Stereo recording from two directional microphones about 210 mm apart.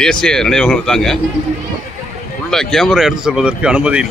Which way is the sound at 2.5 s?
Centre (ahead or behind).